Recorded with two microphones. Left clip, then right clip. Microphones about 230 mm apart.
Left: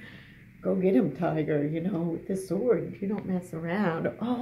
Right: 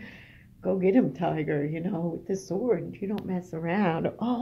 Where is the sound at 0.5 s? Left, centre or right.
Right.